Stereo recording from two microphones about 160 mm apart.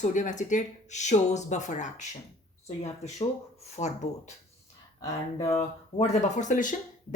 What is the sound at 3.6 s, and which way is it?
Speech, 45° left (ahead or behind).